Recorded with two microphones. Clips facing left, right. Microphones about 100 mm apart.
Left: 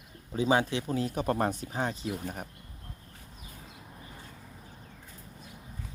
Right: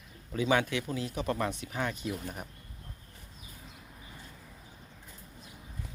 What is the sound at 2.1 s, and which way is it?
Speech, 45° left (ahead or behind).